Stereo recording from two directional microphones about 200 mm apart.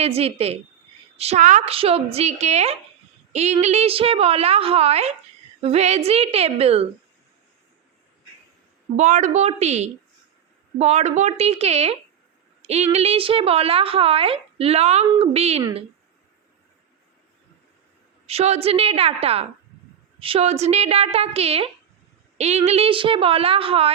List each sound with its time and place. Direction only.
0.0 s a woman's voice: 30° right (ahead or behind)
9.0 s a woman's voice: 35° right (ahead or behind)
18.3 s a woman's voice: 30° right (ahead or behind)